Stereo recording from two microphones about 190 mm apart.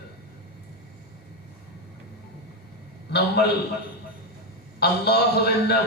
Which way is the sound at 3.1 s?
60° left (ahead or behind).